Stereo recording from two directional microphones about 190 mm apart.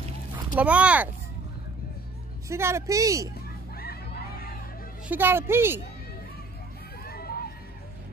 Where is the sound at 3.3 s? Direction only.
55° left (ahead or behind).